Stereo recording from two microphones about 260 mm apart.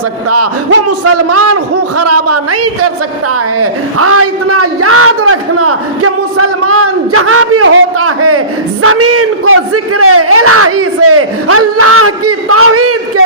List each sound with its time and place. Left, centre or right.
0.9 s a man's voice: right